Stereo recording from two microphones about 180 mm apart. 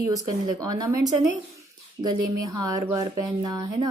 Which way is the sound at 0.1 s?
20° right (ahead or behind).